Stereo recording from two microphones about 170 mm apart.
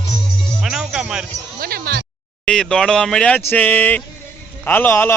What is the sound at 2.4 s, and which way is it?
A man's voice, 5° left (ahead or behind).